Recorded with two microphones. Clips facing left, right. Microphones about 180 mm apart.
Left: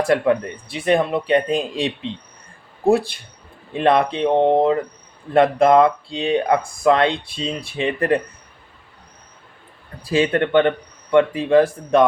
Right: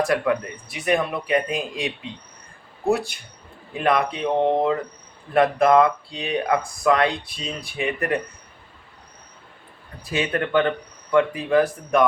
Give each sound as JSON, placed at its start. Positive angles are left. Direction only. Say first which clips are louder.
{"t": 0.0, "sound": "speech", "louder": "left 4 dB", "side_deg": 30}
{"t": 3.8, "sound": "speech", "louder": "left 5 dB", "side_deg": 30}
{"t": 10.0, "sound": "speech", "louder": "left 6 dB", "side_deg": 30}